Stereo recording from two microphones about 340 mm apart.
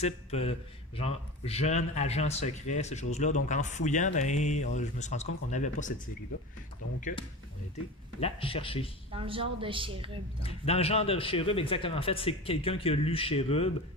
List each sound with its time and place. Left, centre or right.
0.0 s speech: centre
7.0 s speech: left
9.1 s a woman's voice: centre
10.4 s speech: centre